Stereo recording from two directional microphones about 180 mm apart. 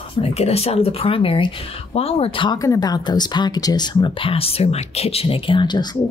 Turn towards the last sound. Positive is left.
turn(degrees=25)  # may be behind; listen again after turning